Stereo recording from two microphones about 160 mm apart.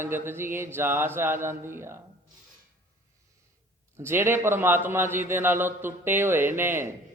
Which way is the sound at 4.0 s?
15° right (ahead or behind).